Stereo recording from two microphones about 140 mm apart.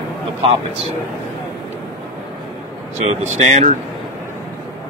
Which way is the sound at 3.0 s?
55° right (ahead or behind).